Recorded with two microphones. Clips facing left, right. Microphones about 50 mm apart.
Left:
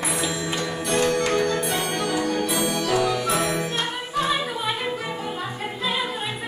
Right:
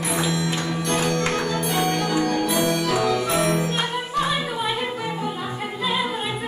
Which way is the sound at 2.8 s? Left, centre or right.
Centre.